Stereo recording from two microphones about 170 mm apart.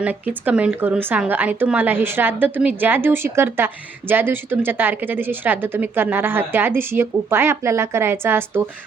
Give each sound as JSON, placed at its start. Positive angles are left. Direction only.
{"t": 0.0, "sound": "speech", "side_deg": -10}